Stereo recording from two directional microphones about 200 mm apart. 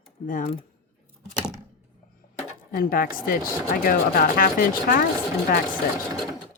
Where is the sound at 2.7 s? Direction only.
45° left (ahead or behind).